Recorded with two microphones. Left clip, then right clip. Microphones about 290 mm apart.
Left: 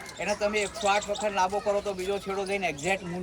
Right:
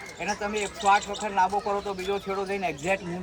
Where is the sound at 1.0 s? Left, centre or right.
Centre.